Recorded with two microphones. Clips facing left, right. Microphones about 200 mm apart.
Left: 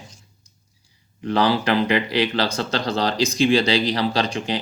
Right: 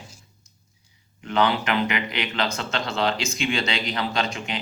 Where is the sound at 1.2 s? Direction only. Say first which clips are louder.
Left 3 dB; 35° left (ahead or behind).